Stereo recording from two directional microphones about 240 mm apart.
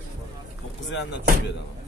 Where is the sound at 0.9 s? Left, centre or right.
Left.